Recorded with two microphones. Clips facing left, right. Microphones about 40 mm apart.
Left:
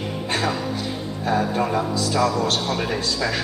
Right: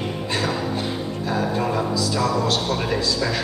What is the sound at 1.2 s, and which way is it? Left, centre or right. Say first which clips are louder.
Speech: left 2 dB; left.